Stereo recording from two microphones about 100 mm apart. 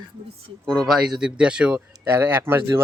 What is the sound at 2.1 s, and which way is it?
Speech, 20° right (ahead or behind).